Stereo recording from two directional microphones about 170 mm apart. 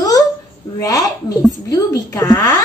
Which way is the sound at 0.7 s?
20° left (ahead or behind).